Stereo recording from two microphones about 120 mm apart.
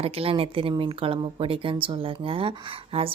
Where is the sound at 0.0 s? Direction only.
55° right (ahead or behind).